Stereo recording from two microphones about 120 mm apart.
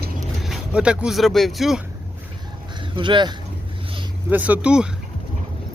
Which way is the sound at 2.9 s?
40° right (ahead or behind).